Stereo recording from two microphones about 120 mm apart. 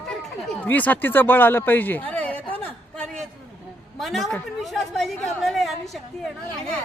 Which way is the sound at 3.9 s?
Centre (ahead or behind).